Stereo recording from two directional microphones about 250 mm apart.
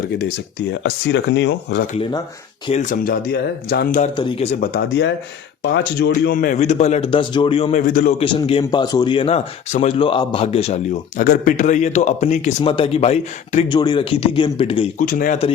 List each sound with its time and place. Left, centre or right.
0.7 s speech: left
1.9 s a man's voice: centre
2.6 s speech: left
4.2 s a man's voice: centre
4.6 s a man's voice: left
8.2 s a man's voice: left